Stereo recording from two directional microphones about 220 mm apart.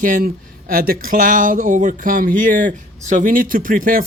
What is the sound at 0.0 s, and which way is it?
Speech, 35° right (ahead or behind).